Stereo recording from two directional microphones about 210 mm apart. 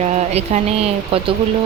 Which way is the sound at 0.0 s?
30° right (ahead or behind).